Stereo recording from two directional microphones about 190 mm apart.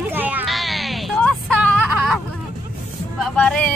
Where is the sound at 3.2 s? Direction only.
5° left (ahead or behind).